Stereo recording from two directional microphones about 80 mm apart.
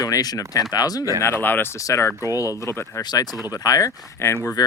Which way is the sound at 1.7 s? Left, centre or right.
Left.